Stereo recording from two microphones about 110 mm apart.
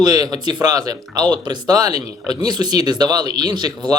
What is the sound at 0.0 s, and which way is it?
Speech, 35° right (ahead or behind).